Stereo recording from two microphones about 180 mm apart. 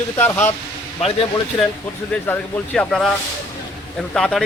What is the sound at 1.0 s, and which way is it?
Speech, 35° left (ahead or behind).